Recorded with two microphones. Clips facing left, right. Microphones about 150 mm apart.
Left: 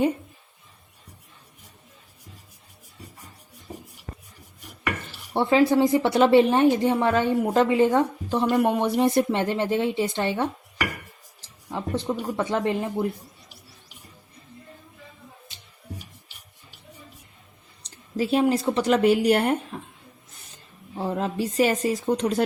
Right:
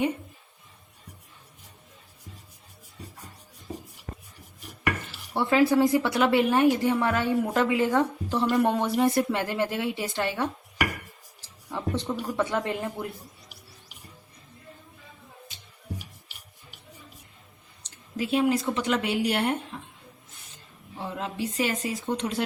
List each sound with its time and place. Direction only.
5.3 s speech: 25° left (ahead or behind)
11.7 s speech: 15° left (ahead or behind)
18.2 s speech: 35° left (ahead or behind)
21.0 s speech: 40° left (ahead or behind)